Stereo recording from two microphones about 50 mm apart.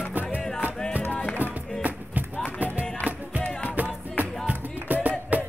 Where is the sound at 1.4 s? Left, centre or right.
Right.